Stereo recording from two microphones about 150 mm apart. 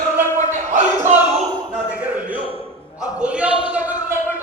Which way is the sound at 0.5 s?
55° right (ahead or behind).